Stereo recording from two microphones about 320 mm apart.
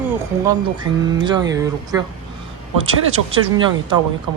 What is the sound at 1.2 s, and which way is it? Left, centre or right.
Speech, centre.